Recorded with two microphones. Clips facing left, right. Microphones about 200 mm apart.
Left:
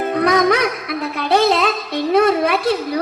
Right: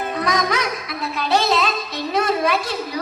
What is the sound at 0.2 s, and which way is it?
Music, 60° left (ahead or behind).